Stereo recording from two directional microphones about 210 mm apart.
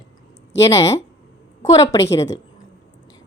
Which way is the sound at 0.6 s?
15° left (ahead or behind).